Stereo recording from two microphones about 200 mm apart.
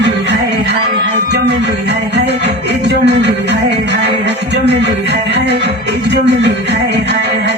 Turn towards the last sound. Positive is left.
turn(degrees=-60)  # may be behind; listen again after turning